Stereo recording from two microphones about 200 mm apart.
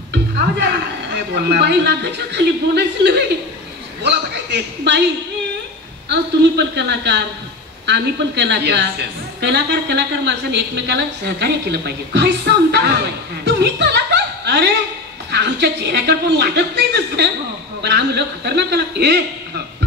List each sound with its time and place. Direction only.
0.1 s a woman's voice: 55° right (ahead or behind)
13.6 s chuckle: 55° right (ahead or behind)
15.3 s a woman's voice: 55° right (ahead or behind)